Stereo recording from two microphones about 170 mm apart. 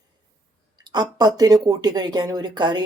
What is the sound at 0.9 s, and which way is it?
Speech, 25° right (ahead or behind).